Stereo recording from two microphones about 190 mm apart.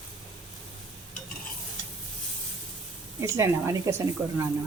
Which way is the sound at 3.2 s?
15° right (ahead or behind).